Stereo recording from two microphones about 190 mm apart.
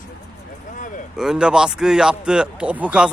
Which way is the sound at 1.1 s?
5° right (ahead or behind).